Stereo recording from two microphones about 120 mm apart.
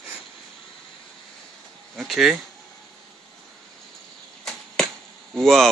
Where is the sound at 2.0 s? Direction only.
Centre (ahead or behind).